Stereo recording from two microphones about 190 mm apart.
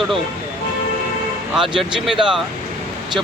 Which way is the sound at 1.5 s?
Centre (ahead or behind).